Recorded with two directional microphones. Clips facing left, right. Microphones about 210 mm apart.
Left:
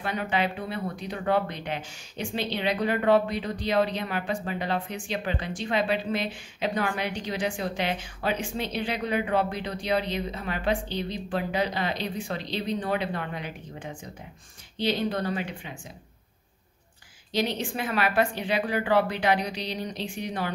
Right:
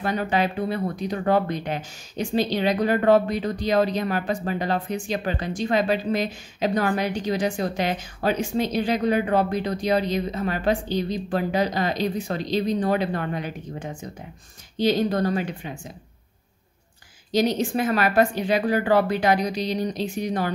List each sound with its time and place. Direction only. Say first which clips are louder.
0.0 s speech: right 4 dB; 40° right (ahead or behind)
17.3 s speech: right 6 dB; 40° right (ahead or behind)